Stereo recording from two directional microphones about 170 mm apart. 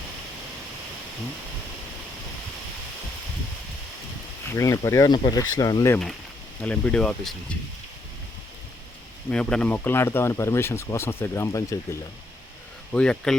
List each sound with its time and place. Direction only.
4.4 s speech: 20° left (ahead or behind)
6.6 s speech: 5° left (ahead or behind)
9.3 s speech: 5° left (ahead or behind)
12.9 s speech: 5° left (ahead or behind)